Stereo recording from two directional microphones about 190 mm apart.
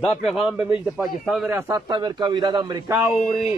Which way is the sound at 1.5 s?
15° right (ahead or behind).